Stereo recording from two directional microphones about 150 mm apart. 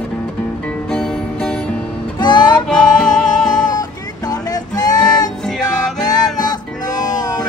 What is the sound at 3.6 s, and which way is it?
Music, 25° left (ahead or behind).